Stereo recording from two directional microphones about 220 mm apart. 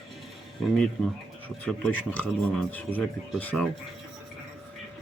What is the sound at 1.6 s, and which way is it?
Speech, 5° left (ahead or behind).